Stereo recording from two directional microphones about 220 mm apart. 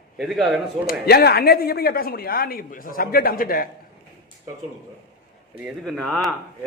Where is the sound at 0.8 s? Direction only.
45° left (ahead or behind).